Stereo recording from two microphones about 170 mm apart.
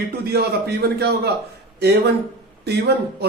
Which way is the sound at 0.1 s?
65° right (ahead or behind).